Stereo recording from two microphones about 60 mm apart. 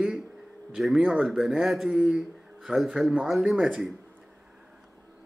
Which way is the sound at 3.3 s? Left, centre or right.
Centre.